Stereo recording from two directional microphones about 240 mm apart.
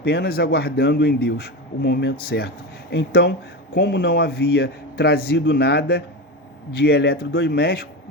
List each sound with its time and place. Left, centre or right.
0.0 s a man's voice: left